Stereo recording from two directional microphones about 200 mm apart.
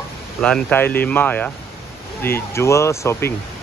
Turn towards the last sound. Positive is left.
turn(degrees=15)  # may be behind; listen again after turning